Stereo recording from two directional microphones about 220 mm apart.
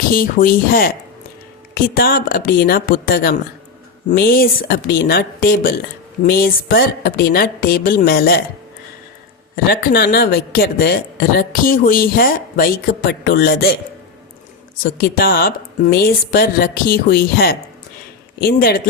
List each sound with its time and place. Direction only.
0.1 s speech: 40° left (ahead or behind)
9.6 s speech: 45° left (ahead or behind)
14.9 s speech: 40° left (ahead or behind)